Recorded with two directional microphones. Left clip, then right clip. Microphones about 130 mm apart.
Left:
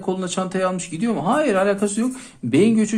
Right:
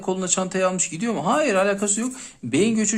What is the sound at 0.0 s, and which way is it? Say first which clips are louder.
Speech: even; 25° right (ahead or behind).